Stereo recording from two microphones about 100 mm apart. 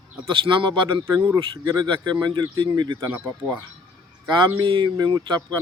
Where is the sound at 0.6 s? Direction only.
50° right (ahead or behind).